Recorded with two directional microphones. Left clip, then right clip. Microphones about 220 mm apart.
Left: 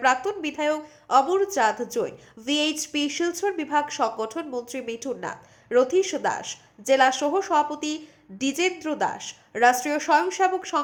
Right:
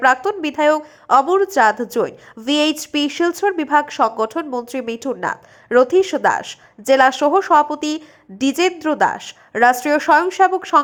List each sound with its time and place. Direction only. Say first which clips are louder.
0.0 s a woman's voice: right 7 dB; 20° right (ahead or behind)